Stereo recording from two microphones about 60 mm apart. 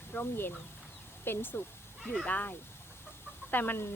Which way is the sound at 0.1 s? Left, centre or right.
Left.